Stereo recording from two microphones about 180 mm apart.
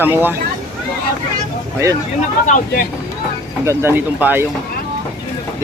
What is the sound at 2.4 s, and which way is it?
Speech, 45° left (ahead or behind).